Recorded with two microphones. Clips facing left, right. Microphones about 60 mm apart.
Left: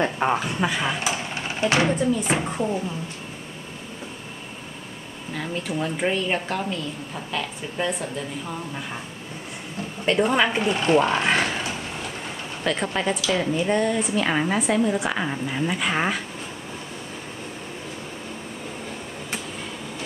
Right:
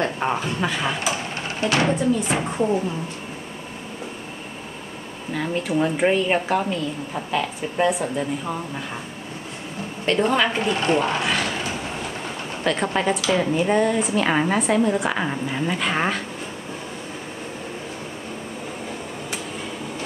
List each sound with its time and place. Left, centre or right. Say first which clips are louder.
0.0 s speech: left 1 dB; centre
1.6 s speech: even; centre
2.3 s a woman's voice: right 3 dB; centre
5.3 s a woman's voice: right 5 dB; centre
10.0 s speech: even; centre
11.2 s a sound: left 2 dB; left
12.6 s a woman's voice: right 3 dB; centre